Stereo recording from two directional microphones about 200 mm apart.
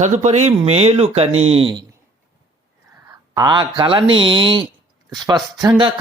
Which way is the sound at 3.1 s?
20° right (ahead or behind).